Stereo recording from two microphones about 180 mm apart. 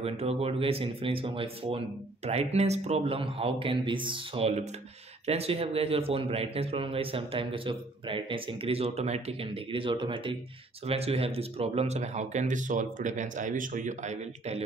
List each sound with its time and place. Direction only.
0.0 s speech: 35° right (ahead or behind)